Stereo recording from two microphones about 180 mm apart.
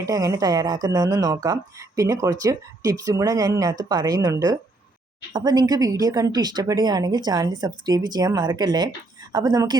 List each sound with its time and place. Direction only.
0.0 s speech: 20° right (ahead or behind)